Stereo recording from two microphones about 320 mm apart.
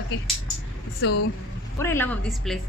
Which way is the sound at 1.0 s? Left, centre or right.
Left.